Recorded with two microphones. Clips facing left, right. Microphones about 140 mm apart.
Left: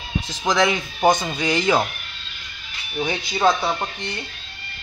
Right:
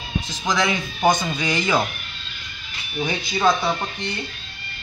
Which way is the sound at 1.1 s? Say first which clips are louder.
Even; 25° left (ahead or behind).